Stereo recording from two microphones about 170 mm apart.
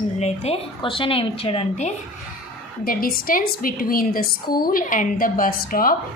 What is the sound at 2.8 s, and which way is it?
A woman's voice, 55° left (ahead or behind).